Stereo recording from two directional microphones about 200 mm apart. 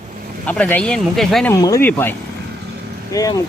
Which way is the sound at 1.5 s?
15° left (ahead or behind).